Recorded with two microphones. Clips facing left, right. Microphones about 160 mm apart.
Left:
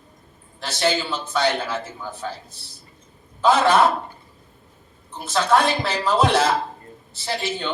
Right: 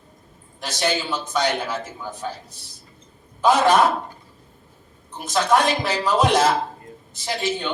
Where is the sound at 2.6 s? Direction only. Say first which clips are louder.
Even; 15° right (ahead or behind).